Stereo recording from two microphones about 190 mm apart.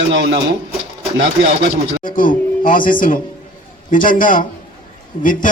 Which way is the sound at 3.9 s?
45° left (ahead or behind).